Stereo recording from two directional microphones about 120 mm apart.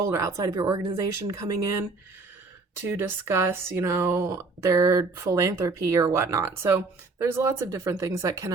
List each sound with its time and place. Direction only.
0.0 s speech: 25° right (ahead or behind)
2.8 s speech: 20° right (ahead or behind)